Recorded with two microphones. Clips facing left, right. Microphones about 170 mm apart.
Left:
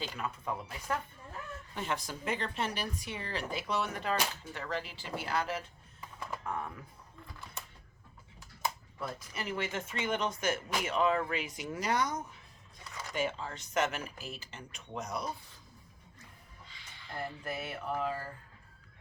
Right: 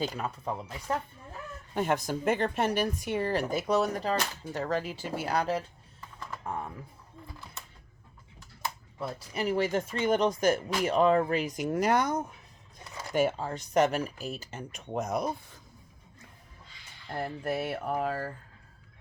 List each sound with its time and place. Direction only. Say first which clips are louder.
0.0 s speech: right 5 dB; 40° right (ahead or behind)
1.7 s a woman's voice: right 9 dB; 50° right (ahead or behind)
6.4 s typing: right 3 dB; 25° right (ahead or behind)
9.0 s a woman's voice: right 7 dB; 35° right (ahead or behind)
17.2 s a woman's voice: right 7 dB; 45° right (ahead or behind)